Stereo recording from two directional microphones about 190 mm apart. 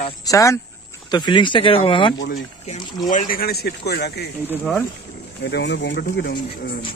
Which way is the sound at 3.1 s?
50° left (ahead or behind).